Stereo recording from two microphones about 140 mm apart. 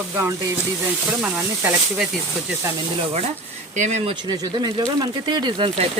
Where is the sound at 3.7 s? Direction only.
55° right (ahead or behind).